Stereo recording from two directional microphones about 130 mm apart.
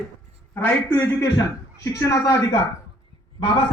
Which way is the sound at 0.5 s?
10° left (ahead or behind).